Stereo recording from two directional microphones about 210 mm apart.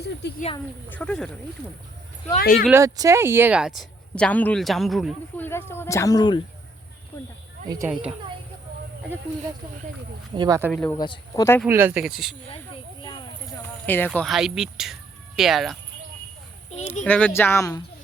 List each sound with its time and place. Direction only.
0.0 s a sound: 50° left (ahead or behind)
0.9 s speech: 5° left (ahead or behind)
2.4 s speech: 45° left (ahead or behind)
2.6 s speech: 15° right (ahead or behind)
5.5 s speech: 10° left (ahead or behind)
10.3 s speech: 20° right (ahead or behind)
10.7 s speech: 5° left (ahead or behind)
10.9 s speech: 20° left (ahead or behind)
11.6 s speech: 10° right (ahead or behind)
13.8 s speech: 10° left (ahead or behind)
16.6 s speech: 30° left (ahead or behind)
17.0 s speech: 5° left (ahead or behind)